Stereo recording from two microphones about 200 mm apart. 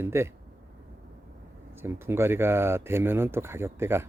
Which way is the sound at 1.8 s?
10° right (ahead or behind).